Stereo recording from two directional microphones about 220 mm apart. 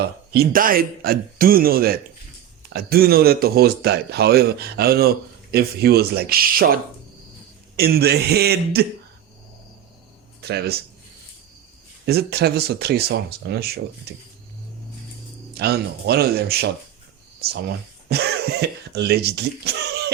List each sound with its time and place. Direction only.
0.0 s speech: 40° right (ahead or behind)
7.8 s speech: 45° right (ahead or behind)
10.4 s speech: 45° right (ahead or behind)
12.0 s speech: 45° right (ahead or behind)
15.5 s speech: 45° right (ahead or behind)
18.1 s speech: 45° right (ahead or behind)